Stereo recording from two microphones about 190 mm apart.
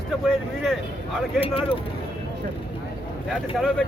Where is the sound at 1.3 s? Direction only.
30° left (ahead or behind).